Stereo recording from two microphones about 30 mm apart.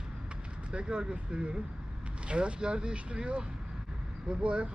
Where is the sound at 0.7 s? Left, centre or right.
Right.